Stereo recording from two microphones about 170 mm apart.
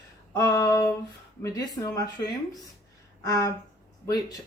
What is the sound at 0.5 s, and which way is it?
Speech, 15° left (ahead or behind).